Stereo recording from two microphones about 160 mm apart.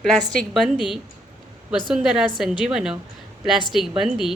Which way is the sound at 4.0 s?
Centre (ahead or behind).